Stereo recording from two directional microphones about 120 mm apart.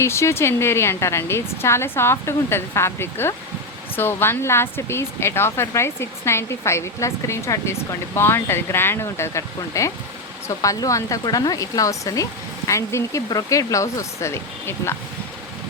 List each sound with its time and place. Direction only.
0.0 s speech: 20° left (ahead or behind)